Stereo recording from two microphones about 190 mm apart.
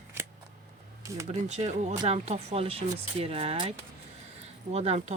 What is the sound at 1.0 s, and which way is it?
Speech, 15° right (ahead or behind).